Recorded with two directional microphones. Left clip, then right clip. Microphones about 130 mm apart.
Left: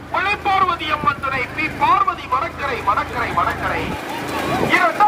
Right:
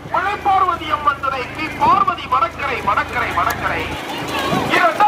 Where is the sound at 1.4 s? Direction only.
5° left (ahead or behind).